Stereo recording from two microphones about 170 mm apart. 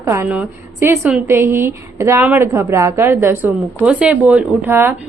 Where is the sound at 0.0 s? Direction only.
15° right (ahead or behind).